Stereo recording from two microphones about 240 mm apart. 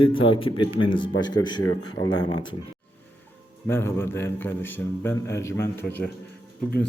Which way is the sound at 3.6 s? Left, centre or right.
Centre.